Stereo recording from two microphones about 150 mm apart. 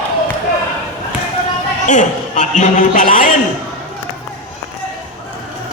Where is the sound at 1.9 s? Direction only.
55° left (ahead or behind).